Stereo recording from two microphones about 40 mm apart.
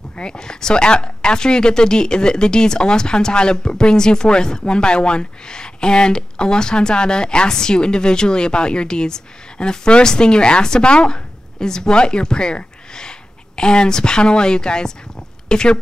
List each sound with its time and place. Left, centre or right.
0.2 s speech: centre